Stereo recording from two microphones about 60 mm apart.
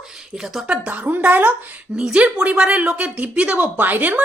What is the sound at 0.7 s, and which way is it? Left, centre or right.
Speech, right.